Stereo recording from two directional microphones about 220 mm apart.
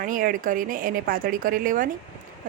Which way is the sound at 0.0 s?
40° right (ahead or behind).